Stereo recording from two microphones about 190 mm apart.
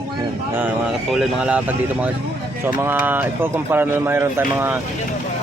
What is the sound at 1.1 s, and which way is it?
Speech, 5° right (ahead or behind).